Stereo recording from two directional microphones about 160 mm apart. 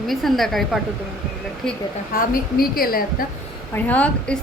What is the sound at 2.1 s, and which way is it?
A woman's voice, 65° left (ahead or behind).